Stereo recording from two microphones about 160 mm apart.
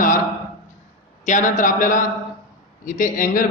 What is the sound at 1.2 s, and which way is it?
A man's voice, 50° left (ahead or behind).